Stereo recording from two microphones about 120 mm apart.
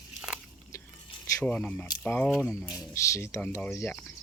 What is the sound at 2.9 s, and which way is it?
Speech, 25° left (ahead or behind).